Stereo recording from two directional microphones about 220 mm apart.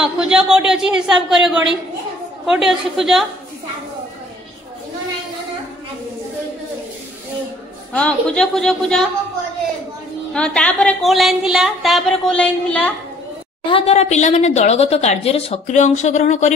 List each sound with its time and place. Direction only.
0.0 s a woman's voice: 5° right (ahead or behind)
7.9 s a woman's voice: 5° left (ahead or behind)
10.3 s a woman's voice: 5° left (ahead or behind)
13.7 s a woman's voice: 25° left (ahead or behind)